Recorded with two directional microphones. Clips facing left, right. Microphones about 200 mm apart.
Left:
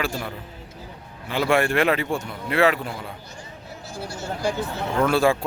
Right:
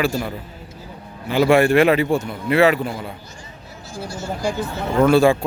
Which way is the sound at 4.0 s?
60° left (ahead or behind).